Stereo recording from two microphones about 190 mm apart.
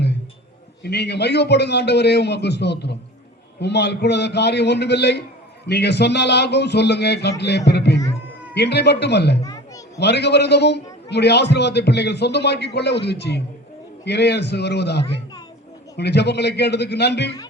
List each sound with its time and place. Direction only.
0.8 s speech: 60° left (ahead or behind)
9.4 s a sound: 15° left (ahead or behind)
10.0 s speech: 60° left (ahead or behind)